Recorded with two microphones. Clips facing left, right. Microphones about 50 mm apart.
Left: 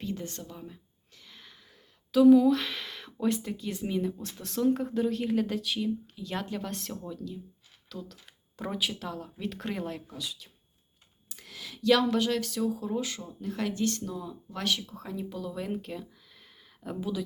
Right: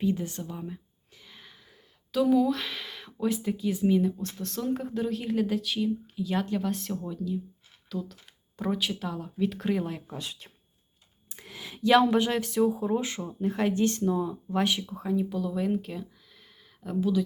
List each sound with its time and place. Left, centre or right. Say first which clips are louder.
0.0 s speech: right 7 dB; centre
10.2 s speech: right 1 dB; right
11.3 s speech: right 2 dB; right; by 17.2 s centre